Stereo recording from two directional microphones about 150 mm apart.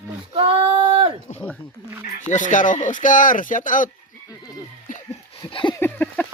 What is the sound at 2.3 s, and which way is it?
Speech, 55° left (ahead or behind).